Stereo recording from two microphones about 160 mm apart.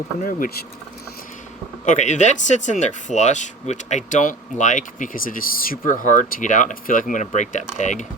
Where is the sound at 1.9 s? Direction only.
50° left (ahead or behind).